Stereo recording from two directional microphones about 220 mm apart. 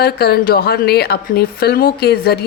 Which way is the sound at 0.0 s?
45° left (ahead or behind).